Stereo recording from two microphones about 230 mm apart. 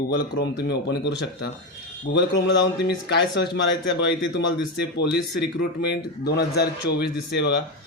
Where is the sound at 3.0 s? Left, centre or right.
Left.